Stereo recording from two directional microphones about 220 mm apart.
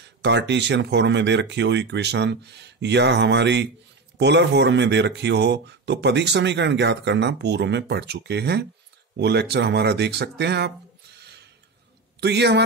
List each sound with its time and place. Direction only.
0.0 s speech: 50° right (ahead or behind)
12.2 s speech: 50° right (ahead or behind)